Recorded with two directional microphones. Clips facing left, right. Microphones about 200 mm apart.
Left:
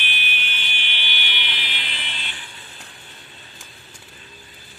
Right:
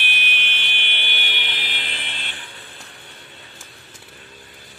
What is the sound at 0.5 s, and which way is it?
Fire alarm, 55° right (ahead or behind).